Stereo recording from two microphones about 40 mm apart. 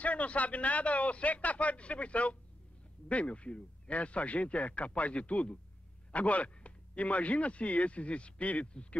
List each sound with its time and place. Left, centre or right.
0.0 s speech: left